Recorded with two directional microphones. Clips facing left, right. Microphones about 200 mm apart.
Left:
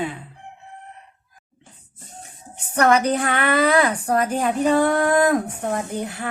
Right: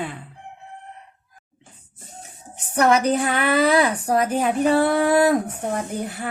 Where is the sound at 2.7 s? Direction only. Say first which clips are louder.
Even; 5° right (ahead or behind).